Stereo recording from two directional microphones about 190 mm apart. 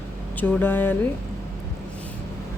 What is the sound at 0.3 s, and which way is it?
Speech, 10° left (ahead or behind).